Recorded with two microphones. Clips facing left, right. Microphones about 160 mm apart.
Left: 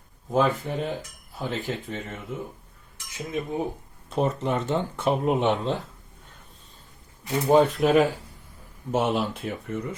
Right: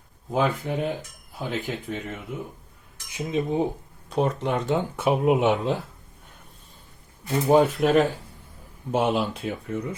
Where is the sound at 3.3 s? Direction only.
20° right (ahead or behind).